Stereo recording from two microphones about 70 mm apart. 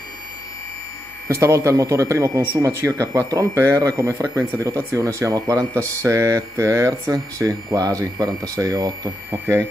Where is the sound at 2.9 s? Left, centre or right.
Right.